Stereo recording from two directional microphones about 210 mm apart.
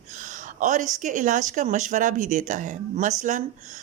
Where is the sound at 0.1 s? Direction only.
35° right (ahead or behind).